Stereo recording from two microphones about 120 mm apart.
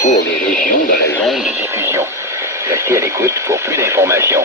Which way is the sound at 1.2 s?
Centre (ahead or behind).